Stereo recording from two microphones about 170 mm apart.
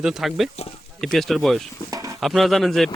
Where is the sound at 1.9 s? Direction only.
20° right (ahead or behind).